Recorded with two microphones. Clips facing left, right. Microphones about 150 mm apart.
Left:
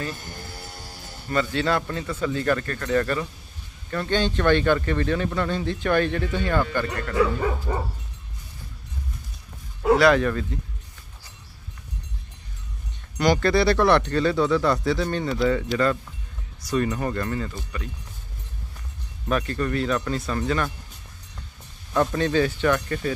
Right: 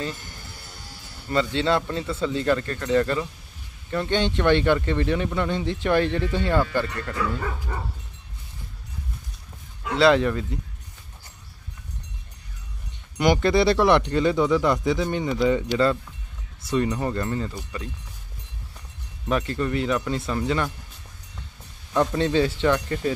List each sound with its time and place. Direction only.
1.3 s speech: 25° right (ahead or behind)
7.7 s dog: 25° left (ahead or behind)
9.9 s speech: 25° right (ahead or behind)
13.2 s speech: 20° right (ahead or behind)
19.2 s speech: 20° right (ahead or behind)
22.1 s speech: 25° right (ahead or behind)